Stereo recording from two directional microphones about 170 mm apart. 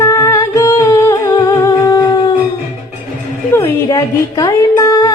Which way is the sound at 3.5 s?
15° left (ahead or behind).